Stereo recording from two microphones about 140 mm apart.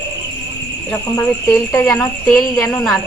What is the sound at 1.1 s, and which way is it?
Speech, 20° left (ahead or behind).